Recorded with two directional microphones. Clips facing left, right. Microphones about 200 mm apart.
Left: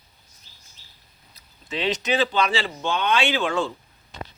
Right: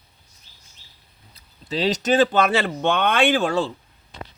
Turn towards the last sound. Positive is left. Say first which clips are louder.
# right 4 dB
turn(degrees=-40)  # may be behind; listen again after turning